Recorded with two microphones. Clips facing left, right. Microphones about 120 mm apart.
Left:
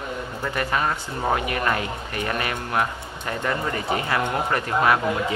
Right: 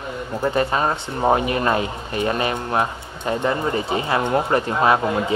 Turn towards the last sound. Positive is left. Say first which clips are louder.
# right 2 dB
turn(degrees=-25)  # may be behind; listen again after turning